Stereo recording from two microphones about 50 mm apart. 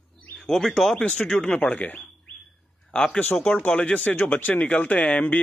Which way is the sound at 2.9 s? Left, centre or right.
Centre.